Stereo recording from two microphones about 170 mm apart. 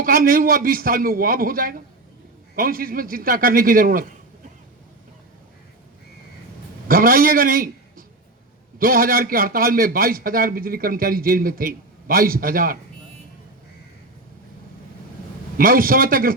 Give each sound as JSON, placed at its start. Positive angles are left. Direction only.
{"t": 0.0, "sound": "a man's voice", "side_deg": -55}
{"t": 6.8, "sound": "a man's voice", "side_deg": -55}
{"t": 15.5, "sound": "a man's voice", "side_deg": -55}